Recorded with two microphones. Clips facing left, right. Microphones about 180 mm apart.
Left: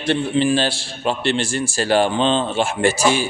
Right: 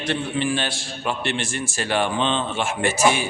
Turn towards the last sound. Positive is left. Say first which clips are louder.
# left 3 dB
turn(degrees=30)  # may be behind; listen again after turning